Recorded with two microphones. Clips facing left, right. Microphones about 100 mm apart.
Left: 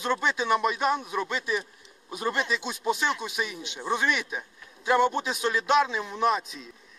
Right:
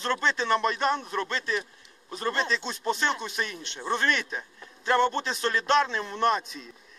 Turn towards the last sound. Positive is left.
turn(degrees=0)  # may be behind; listen again after turning